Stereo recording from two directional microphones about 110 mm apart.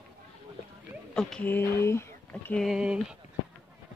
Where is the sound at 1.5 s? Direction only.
20° left (ahead or behind).